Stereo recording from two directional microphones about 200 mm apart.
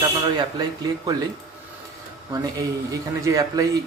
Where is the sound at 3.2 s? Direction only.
15° right (ahead or behind).